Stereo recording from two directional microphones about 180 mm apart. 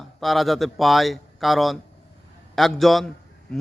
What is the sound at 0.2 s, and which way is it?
A man's voice, centre (ahead or behind).